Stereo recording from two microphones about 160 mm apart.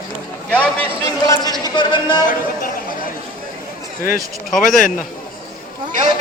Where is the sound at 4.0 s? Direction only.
60° left (ahead or behind).